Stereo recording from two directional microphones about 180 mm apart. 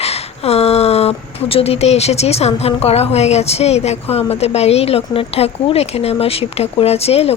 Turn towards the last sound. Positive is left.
turn(degrees=35)  # may be behind; listen again after turning